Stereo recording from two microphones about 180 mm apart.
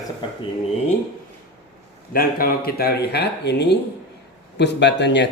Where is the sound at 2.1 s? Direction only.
55° left (ahead or behind).